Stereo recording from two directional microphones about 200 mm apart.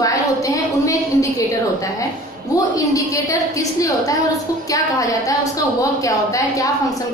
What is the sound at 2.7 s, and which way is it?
A woman's voice, 15° left (ahead or behind).